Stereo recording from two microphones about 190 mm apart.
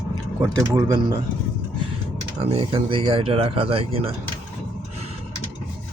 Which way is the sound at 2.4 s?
30° right (ahead or behind).